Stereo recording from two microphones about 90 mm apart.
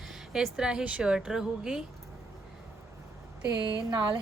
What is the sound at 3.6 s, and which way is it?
Speech, 50° right (ahead or behind).